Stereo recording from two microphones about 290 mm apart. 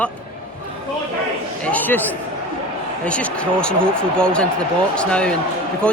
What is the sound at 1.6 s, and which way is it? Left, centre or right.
Speech, centre.